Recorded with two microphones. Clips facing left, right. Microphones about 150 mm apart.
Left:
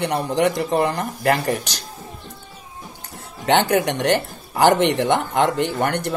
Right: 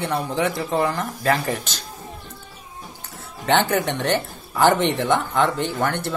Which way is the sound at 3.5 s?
20° left (ahead or behind).